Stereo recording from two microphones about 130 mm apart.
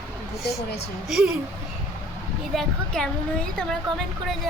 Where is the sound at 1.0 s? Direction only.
5° right (ahead or behind).